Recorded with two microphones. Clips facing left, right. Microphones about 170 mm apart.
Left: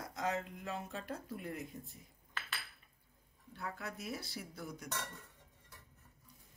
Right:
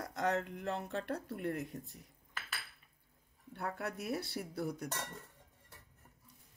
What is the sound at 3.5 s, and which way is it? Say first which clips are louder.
Speech: right 4 dB; 60° right (ahead or behind).